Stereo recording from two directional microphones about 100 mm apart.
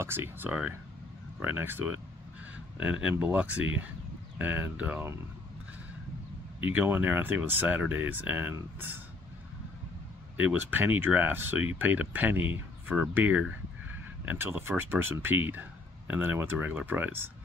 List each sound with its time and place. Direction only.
0.0 s speech: 25° right (ahead or behind)
0.5 s speech: 10° right (ahead or behind)
6.6 s speech: 15° right (ahead or behind)
10.3 s speech: 15° right (ahead or behind)